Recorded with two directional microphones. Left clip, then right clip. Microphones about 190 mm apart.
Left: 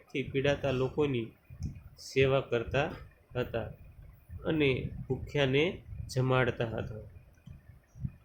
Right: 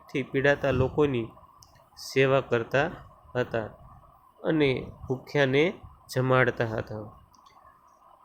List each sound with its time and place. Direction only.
0.1 s speech: 30° right (ahead or behind)